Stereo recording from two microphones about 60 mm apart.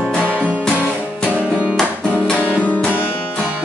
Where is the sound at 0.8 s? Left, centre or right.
Centre.